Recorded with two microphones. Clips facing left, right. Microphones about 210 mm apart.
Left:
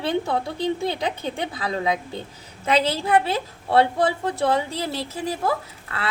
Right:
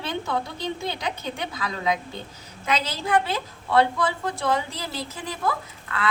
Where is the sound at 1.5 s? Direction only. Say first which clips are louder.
Left 1 dB; 30° left (ahead or behind).